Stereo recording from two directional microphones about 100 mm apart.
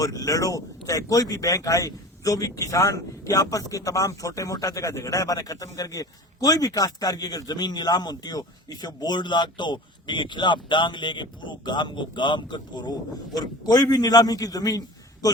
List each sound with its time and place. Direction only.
0.0 s speech: 35° left (ahead or behind)